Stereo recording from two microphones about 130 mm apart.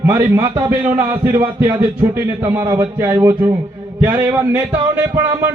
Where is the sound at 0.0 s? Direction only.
20° right (ahead or behind).